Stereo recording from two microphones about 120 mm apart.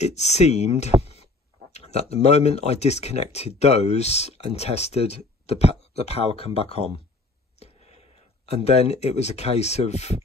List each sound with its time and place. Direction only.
0.0 s speech: 65° left (ahead or behind)
7.5 s a sound: 60° left (ahead or behind)
8.5 s speech: 60° left (ahead or behind)